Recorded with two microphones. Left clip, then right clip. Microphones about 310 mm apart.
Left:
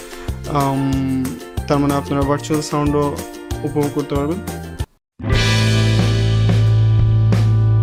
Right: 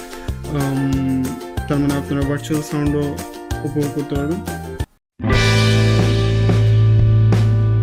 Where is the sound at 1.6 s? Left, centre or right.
Centre.